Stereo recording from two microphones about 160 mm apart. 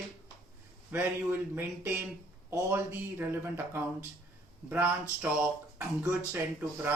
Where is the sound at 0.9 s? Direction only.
10° right (ahead or behind).